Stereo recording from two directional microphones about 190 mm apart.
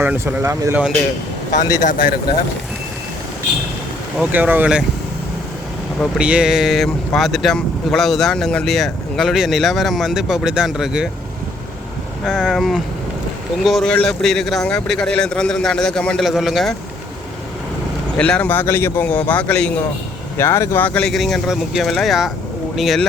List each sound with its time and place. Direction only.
0.0 s speech: 10° right (ahead or behind)
1.7 s speech: 45° left (ahead or behind)
4.2 s speech: 10° right (ahead or behind)
6.0 s speech: 5° right (ahead or behind)
12.2 s speech: 5° right (ahead or behind)
18.2 s speech: 5° left (ahead or behind)